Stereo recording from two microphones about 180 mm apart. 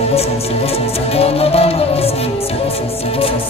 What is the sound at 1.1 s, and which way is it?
Music, 35° left (ahead or behind).